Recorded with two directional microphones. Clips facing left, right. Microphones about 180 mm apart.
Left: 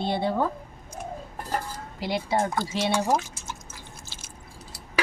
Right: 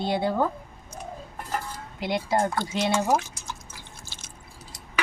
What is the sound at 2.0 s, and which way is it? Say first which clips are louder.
Speech: right 1 dB; centre (ahead or behind).